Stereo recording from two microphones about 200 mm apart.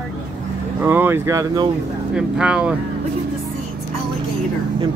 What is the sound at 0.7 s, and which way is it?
Speech, 10° right (ahead or behind).